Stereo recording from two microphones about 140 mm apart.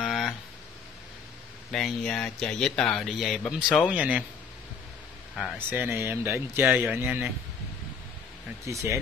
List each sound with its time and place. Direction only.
0.0 s a sound: centre (ahead or behind)
1.7 s a man's voice: 5° left (ahead or behind)
5.3 s speech: centre (ahead or behind)
5.7 s speech: 15° right (ahead or behind)
8.6 s speech: 20° right (ahead or behind)